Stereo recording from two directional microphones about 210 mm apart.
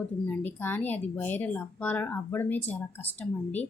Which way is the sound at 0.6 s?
10° left (ahead or behind).